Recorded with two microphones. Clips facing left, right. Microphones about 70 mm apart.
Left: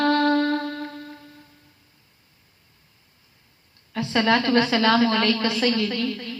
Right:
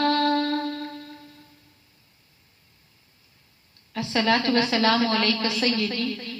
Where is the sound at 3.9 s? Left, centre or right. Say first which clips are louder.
Left 2 dB; left.